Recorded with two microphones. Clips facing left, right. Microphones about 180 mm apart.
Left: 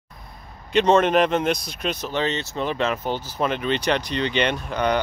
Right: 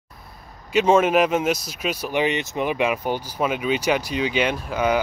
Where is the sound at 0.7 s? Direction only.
5° right (ahead or behind).